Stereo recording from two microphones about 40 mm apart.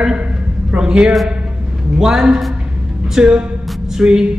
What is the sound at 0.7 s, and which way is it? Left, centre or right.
A man's voice, right.